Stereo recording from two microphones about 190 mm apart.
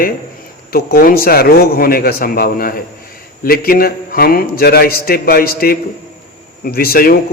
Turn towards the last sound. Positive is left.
turn(degrees=50)  # may be behind; listen again after turning